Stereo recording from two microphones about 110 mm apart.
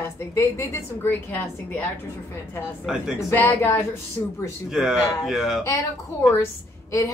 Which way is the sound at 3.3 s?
20° left (ahead or behind).